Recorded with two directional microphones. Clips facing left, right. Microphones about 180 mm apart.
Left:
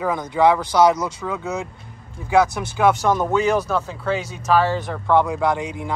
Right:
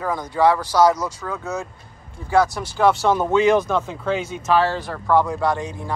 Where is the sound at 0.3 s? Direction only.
20° left (ahead or behind).